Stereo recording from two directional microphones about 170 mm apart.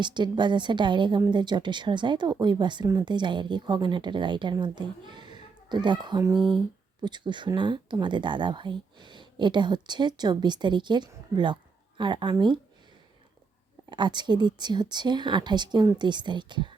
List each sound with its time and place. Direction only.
0.0 s speech: 25° right (ahead or behind)
13.9 s speech: 25° right (ahead or behind)